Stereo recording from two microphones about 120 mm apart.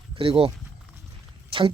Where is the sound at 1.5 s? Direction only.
45° right (ahead or behind).